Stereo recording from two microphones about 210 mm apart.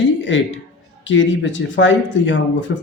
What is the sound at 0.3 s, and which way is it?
A man's voice, 65° left (ahead or behind).